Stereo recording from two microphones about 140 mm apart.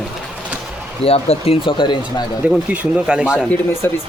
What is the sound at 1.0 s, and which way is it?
Speech, 45° left (ahead or behind).